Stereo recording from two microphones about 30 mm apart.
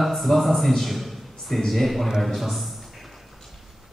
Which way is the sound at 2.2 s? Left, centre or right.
Centre.